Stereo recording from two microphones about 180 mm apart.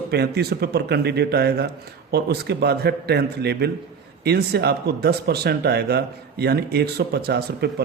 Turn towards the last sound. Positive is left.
turn(degrees=-65)  # may be behind; listen again after turning